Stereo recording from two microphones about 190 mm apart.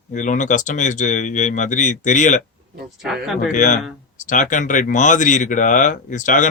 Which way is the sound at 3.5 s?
40° left (ahead or behind).